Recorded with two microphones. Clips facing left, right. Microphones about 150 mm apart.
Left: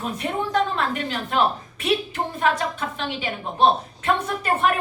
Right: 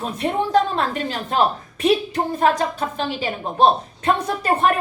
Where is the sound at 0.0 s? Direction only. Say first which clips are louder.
Right 4 dB; 35° right (ahead or behind).